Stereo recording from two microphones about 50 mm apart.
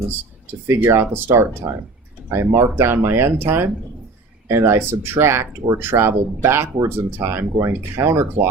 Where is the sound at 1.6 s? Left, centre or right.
Right.